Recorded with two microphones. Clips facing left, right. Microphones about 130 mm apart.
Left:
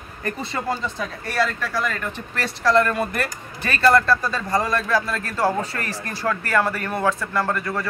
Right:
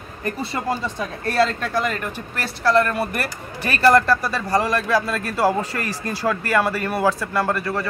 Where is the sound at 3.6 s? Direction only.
15° right (ahead or behind).